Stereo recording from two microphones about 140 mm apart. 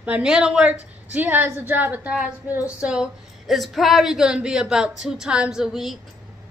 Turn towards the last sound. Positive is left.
turn(degrees=0)  # may be behind; listen again after turning